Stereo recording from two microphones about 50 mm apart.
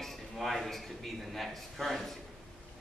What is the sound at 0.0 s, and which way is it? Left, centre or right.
A man's voice, centre.